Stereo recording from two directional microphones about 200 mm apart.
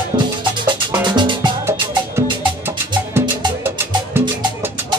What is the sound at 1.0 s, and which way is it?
Music, 25° right (ahead or behind).